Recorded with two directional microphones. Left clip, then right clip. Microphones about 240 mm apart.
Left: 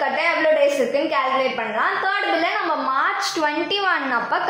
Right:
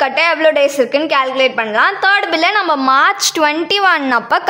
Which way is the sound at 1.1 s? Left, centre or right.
Right.